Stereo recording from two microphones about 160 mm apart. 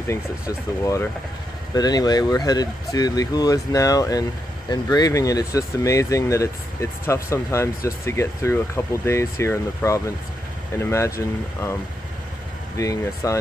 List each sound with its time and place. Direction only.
1.7 s speech: 25° left (ahead or behind)
12.7 s speech: 20° left (ahead or behind)